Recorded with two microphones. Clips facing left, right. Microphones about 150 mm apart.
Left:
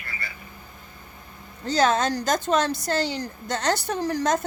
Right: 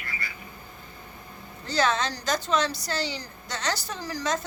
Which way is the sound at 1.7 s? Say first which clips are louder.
Left 4 dB; 45° left (ahead or behind).